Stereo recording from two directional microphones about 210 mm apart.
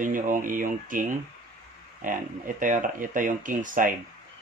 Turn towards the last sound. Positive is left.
turn(degrees=-40)  # may be behind; listen again after turning